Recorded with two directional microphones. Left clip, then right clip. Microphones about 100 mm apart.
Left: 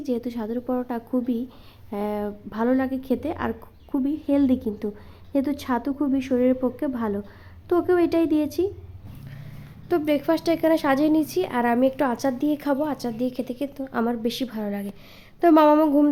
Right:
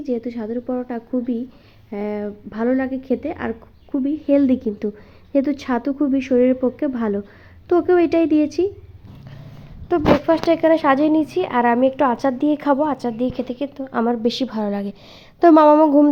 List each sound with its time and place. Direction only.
0.0 s a woman's voice: centre (ahead or behind)
4.3 s speech: 20° right (ahead or behind)
9.9 s speech: 10° right (ahead or behind)
14.1 s speech: 25° right (ahead or behind)
15.6 s speech: 10° right (ahead or behind)